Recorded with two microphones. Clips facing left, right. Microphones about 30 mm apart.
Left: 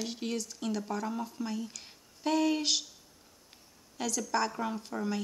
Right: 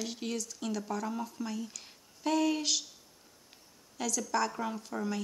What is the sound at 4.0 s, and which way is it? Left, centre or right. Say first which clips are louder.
Speech: even; left.